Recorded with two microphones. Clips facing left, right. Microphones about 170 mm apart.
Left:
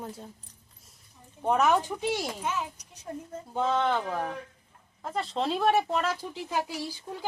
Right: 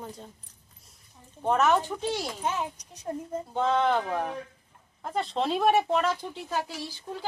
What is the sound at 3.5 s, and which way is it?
Speech, centre (ahead or behind).